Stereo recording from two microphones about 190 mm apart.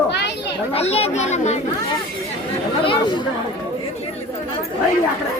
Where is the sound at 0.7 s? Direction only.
30° left (ahead or behind).